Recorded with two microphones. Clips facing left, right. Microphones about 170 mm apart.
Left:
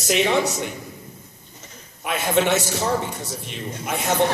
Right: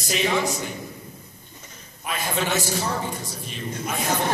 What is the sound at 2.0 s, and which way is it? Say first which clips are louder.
Speech: left 6 dB; 70° left (ahead or behind).